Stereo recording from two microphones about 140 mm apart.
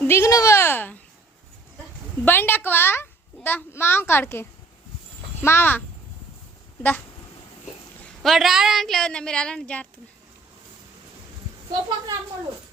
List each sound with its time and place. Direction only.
0.0 s a sound: 20° left (ahead or behind)
2.2 s a child's voice: 15° left (ahead or behind)
8.2 s a woman's voice: centre (ahead or behind)
11.7 s a woman's voice: 30° right (ahead or behind)